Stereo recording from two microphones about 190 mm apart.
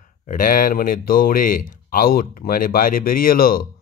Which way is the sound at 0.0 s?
45° left (ahead or behind).